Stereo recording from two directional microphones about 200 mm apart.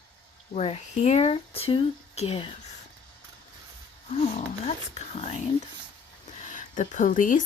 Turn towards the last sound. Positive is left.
turn(degrees=40)  # may be behind; listen again after turning